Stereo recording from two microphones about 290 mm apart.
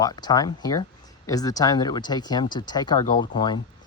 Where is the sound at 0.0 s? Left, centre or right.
Centre.